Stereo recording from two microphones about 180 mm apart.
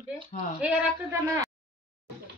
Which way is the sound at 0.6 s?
5° right (ahead or behind).